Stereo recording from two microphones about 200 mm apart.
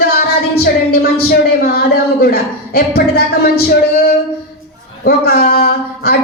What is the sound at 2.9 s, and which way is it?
Speech, 50° left (ahead or behind).